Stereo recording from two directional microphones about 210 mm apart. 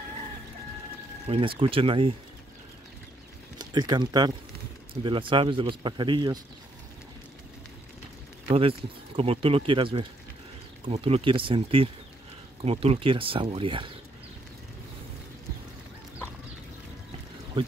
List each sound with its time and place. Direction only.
1.3 s speech: 30° right (ahead or behind)
3.5 s speech: 20° right (ahead or behind)
8.5 s speech: 25° right (ahead or behind)
17.6 s speech: 25° right (ahead or behind)